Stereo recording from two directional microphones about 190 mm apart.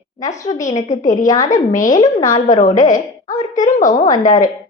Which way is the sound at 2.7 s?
40° left (ahead or behind).